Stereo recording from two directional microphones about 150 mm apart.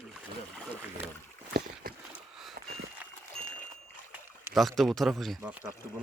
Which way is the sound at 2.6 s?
90° right.